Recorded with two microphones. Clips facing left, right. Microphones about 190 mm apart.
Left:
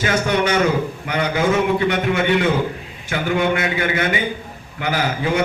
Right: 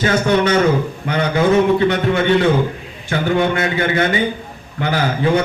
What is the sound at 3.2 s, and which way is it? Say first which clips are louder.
A man's voice: right 2 dB; 35° right (ahead or behind).